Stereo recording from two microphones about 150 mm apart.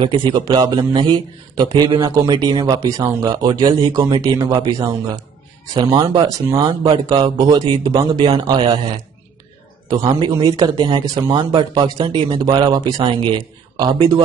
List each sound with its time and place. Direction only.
0.0 s a man's voice: 35° right (ahead or behind)
9.8 s a man's voice: 30° right (ahead or behind)